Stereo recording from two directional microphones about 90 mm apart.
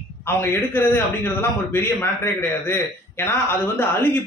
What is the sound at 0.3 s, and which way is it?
A man's voice, 25° left (ahead or behind).